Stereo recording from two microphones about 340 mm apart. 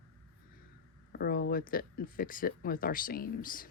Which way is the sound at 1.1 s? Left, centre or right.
Left.